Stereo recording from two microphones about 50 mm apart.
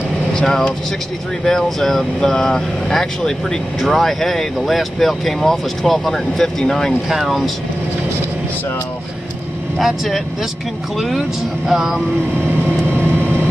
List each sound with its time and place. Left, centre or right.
0.3 s speech: centre
7.1 s speech: centre
9.8 s speech: centre